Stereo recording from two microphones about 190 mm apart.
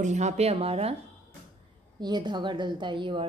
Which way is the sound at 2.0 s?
20° right (ahead or behind).